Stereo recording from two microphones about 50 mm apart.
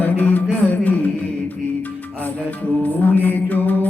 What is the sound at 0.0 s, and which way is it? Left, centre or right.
Music, left.